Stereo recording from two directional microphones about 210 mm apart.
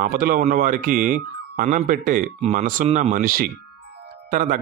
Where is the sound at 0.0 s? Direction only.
40° right (ahead or behind).